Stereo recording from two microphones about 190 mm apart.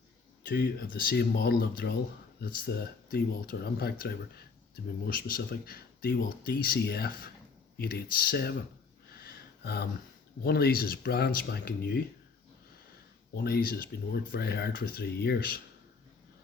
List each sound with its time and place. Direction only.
0.4 s speech: 55° left (ahead or behind)
9.1 s a sound: 55° left (ahead or behind)
10.4 s speech: 55° left (ahead or behind)
13.3 s speech: 55° left (ahead or behind)